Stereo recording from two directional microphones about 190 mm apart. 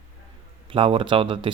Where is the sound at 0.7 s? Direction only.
25° right (ahead or behind).